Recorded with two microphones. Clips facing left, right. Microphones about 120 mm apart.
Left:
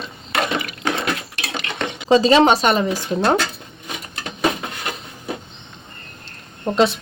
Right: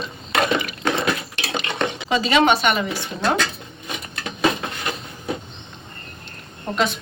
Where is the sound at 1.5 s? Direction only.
20° right (ahead or behind).